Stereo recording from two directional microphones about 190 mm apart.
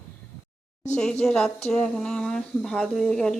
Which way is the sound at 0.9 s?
5° left (ahead or behind).